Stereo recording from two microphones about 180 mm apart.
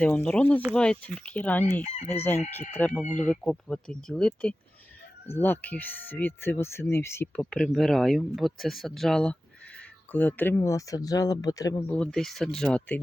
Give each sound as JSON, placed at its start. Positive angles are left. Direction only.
{"t": 0.0, "sound": "speech", "side_deg": 5}
{"t": 1.8, "sound": "chicken", "side_deg": 40}
{"t": 2.7, "sound": "speech", "side_deg": 10}
{"t": 11.9, "sound": "speech", "side_deg": 5}